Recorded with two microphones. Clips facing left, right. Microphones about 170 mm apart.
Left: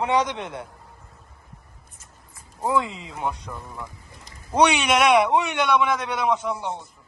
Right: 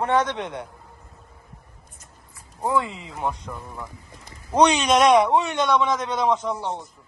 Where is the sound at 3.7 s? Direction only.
20° right (ahead or behind).